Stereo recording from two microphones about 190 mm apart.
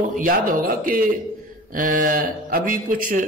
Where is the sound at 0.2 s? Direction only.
45° right (ahead or behind).